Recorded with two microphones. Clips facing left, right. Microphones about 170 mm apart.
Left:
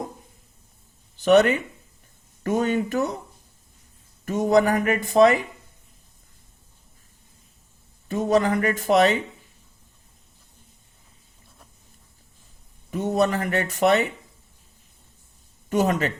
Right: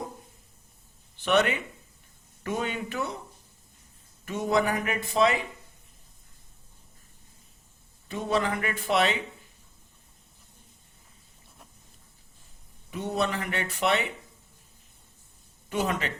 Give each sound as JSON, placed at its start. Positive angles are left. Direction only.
{"t": 1.2, "sound": "speech", "side_deg": 40}
{"t": 4.3, "sound": "speech", "side_deg": 45}
{"t": 8.0, "sound": "speech", "side_deg": 45}
{"t": 12.9, "sound": "speech", "side_deg": 45}
{"t": 15.7, "sound": "speech", "side_deg": 45}